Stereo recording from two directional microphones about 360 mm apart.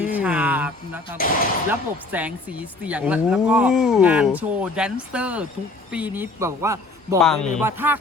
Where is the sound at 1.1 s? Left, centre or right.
Left.